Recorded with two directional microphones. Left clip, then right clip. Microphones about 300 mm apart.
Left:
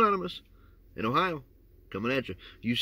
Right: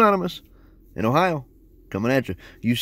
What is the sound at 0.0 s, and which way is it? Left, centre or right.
Speech, right.